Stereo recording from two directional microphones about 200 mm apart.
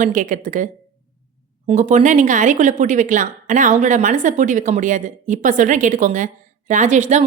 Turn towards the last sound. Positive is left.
turn(degrees=-35)  # may be behind; listen again after turning